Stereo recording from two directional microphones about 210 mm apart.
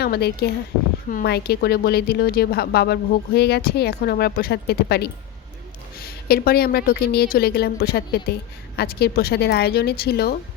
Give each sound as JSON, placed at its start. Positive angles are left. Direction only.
{"t": 0.0, "sound": "speech", "side_deg": 50}